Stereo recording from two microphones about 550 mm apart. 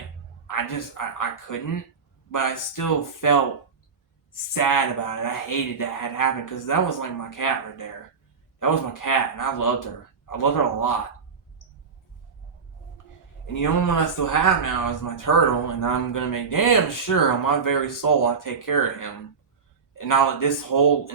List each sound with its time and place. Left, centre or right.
0.4 s speech: left
13.5 s speech: left